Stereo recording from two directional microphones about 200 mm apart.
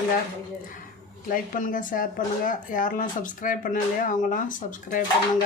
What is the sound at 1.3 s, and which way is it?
Speech, 40° left (ahead or behind).